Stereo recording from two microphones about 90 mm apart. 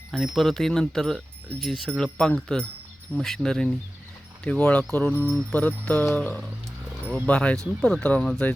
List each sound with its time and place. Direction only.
0.1 s speech: centre (ahead or behind)